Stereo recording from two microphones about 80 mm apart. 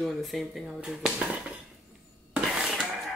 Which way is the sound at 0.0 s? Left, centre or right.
Centre.